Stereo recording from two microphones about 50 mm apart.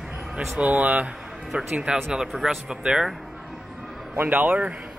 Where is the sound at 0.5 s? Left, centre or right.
Right; by 2.6 s centre.